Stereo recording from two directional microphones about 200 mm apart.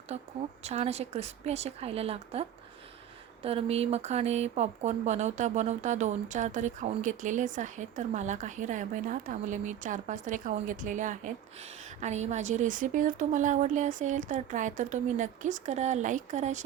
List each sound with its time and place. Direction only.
0.1 s speech: 30° right (ahead or behind)